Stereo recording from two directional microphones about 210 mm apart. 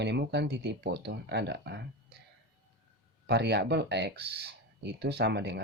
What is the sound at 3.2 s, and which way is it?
Speech, 50° right (ahead or behind).